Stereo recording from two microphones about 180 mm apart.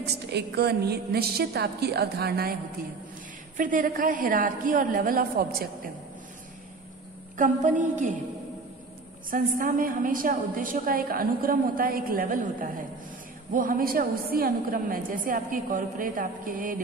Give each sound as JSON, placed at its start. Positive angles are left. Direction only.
{"t": 0.0, "sound": "a woman's voice", "side_deg": -65}
{"t": 3.5, "sound": "a woman's voice", "side_deg": -50}
{"t": 7.3, "sound": "a woman's voice", "side_deg": -45}
{"t": 9.3, "sound": "a woman's voice", "side_deg": -50}